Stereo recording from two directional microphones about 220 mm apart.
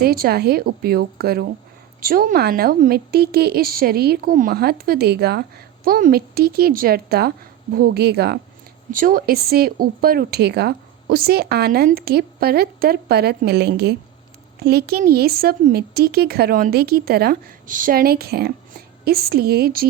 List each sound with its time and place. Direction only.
0.0 s a woman's voice: 45° right (ahead or behind)